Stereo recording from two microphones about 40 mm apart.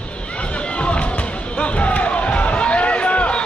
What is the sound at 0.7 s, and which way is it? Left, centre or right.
Music, left.